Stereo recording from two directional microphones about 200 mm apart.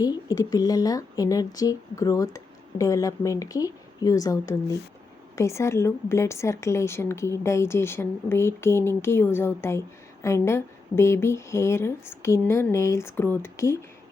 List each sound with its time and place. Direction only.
0.0 s a woman's voice: 20° left (ahead or behind)